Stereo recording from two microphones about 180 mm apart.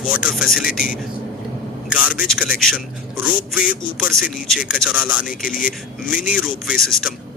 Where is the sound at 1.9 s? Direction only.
5° right (ahead or behind).